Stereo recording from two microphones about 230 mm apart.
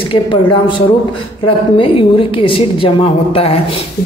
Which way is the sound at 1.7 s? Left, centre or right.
Left.